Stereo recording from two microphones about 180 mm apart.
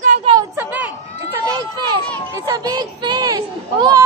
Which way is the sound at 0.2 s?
25° right (ahead or behind).